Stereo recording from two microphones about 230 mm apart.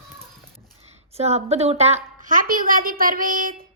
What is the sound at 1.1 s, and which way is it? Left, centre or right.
A woman's voice, right.